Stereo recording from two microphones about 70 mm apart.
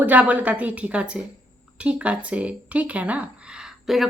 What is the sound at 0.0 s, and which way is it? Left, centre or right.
Speech, right.